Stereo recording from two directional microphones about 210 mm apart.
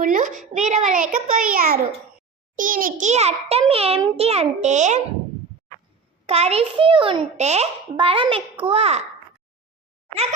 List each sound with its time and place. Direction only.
0.0 s a child's voice: 40° right (ahead or behind)
6.2 s a child's voice: 30° right (ahead or behind)